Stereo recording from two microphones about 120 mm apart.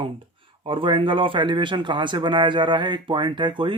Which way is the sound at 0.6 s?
45° right (ahead or behind).